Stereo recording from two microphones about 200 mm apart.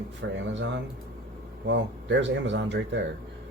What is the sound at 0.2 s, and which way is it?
Speech, 75° right (ahead or behind).